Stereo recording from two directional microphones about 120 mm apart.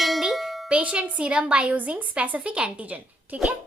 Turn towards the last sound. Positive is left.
turn(degrees=-10)  # may be behind; listen again after turning